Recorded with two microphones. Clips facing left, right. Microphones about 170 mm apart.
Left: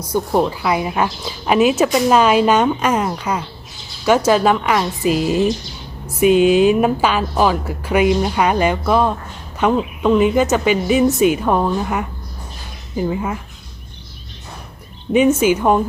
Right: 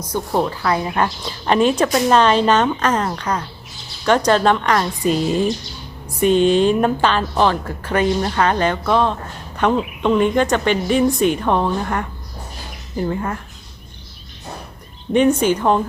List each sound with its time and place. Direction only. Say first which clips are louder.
0.0 s a woman's voice: left 3 dB; 10° left (ahead or behind)
15.1 s speech: left 1 dB; 5° left (ahead or behind)